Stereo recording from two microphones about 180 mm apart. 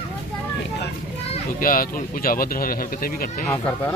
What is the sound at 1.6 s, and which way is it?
Speech, 50° left (ahead or behind).